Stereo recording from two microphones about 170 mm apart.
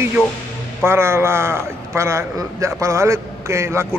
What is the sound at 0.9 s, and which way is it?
Speech, 15° right (ahead or behind).